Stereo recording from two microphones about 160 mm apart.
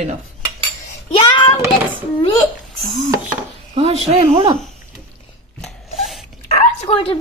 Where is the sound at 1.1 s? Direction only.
30° left (ahead or behind).